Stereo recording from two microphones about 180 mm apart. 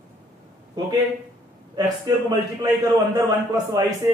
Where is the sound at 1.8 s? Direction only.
20° right (ahead or behind).